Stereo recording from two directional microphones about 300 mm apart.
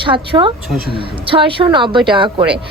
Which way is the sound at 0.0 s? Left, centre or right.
Centre.